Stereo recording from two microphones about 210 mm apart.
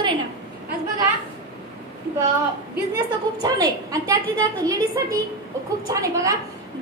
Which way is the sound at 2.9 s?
20° right (ahead or behind).